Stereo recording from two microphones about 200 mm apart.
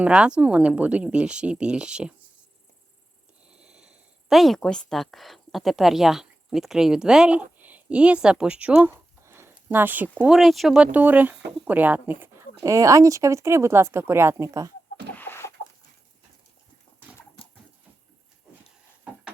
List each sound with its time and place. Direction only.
0.0 s speech: 5° right (ahead or behind)
3.5 s speech: 5° right (ahead or behind)
15.1 s chicken: 10° left (ahead or behind)